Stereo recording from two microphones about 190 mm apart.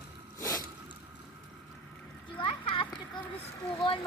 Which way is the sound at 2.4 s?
30° left (ahead or behind).